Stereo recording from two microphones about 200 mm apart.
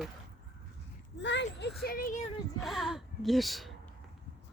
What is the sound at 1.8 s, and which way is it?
Speech, 45° left (ahead or behind).